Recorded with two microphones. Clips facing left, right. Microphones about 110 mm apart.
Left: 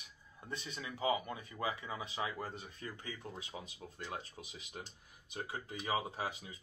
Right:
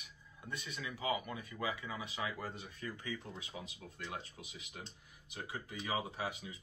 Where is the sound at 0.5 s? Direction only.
30° left (ahead or behind).